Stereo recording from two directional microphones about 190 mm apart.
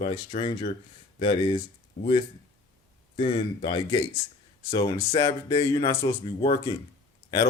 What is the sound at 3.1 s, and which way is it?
Speech, 30° left (ahead or behind).